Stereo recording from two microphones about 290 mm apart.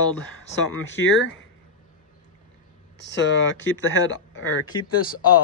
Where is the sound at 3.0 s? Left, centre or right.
Left.